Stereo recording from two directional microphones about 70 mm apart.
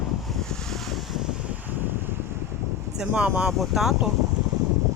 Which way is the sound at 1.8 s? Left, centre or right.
Right.